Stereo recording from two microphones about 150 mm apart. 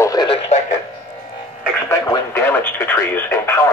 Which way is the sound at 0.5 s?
45° left (ahead or behind).